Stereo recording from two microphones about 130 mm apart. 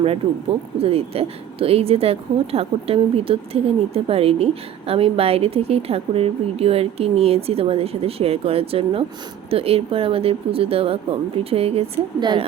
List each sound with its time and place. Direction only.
0.8 s a woman's voice: 50° right (ahead or behind)
12.2 s a woman's voice: 35° right (ahead or behind)